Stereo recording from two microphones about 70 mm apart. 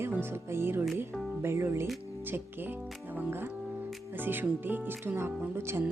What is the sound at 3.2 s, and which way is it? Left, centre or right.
Speech, right.